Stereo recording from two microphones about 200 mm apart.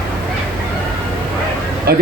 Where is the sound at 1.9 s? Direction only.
50° right (ahead or behind).